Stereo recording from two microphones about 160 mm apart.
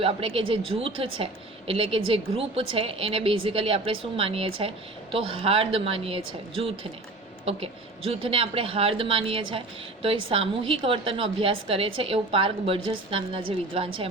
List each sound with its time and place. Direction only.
0.0 s a woman's voice: 35° right (ahead or behind)